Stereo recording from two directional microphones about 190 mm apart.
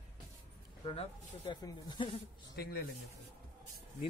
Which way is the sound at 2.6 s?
55° left (ahead or behind).